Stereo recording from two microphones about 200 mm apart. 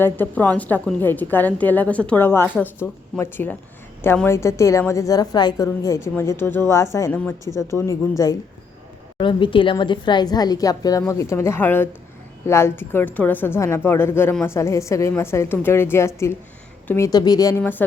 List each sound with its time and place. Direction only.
0.0 s a woman's voice: 10° left (ahead or behind)